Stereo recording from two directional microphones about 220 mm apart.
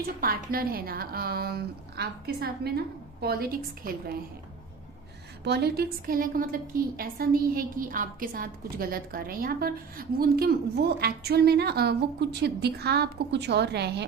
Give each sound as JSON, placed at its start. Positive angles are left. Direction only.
{"t": 0.0, "sound": "a woman's voice", "side_deg": -40}
{"t": 5.4, "sound": "a woman's voice", "side_deg": -50}